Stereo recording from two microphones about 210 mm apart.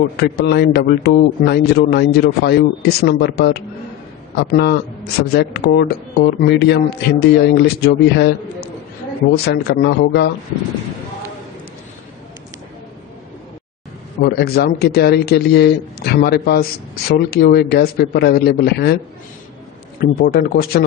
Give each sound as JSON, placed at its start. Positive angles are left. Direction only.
{"t": 0.2, "sound": "a man's voice", "side_deg": 50}
{"t": 14.2, "sound": "a man's voice", "side_deg": 50}
{"t": 20.0, "sound": "a man's voice", "side_deg": 45}